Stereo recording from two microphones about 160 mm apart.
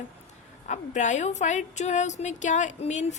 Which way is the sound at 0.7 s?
50° left (ahead or behind).